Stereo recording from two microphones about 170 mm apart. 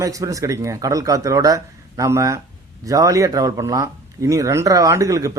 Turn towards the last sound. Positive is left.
turn(degrees=-20)  # may be behind; listen again after turning